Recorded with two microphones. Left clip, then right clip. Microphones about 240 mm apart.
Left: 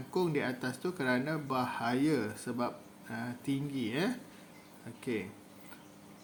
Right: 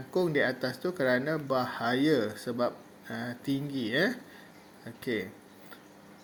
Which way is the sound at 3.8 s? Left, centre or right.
Left.